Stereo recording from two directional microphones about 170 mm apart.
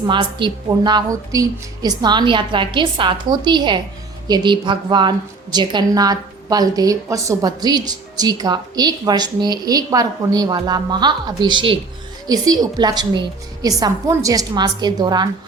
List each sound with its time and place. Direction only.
0.1 s a woman's voice: 30° right (ahead or behind)